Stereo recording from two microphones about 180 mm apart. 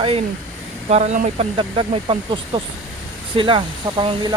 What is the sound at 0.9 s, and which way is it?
Speech, 40° right (ahead or behind).